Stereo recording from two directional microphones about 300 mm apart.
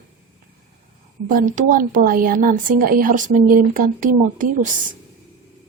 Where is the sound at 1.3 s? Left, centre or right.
Right.